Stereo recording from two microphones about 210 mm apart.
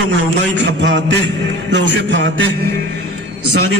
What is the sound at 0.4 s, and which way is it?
A man's voice, 55° right (ahead or behind).